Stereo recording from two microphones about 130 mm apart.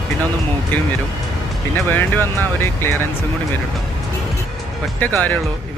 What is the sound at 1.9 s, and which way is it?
Speech, 15° left (ahead or behind).